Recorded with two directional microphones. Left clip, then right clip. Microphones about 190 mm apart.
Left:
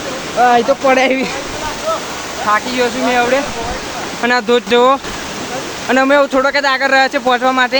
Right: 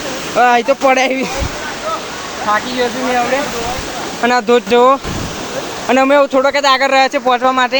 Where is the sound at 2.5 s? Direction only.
5° left (ahead or behind).